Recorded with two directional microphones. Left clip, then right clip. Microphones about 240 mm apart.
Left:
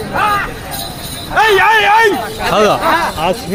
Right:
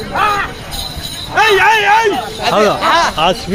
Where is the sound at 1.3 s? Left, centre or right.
Centre.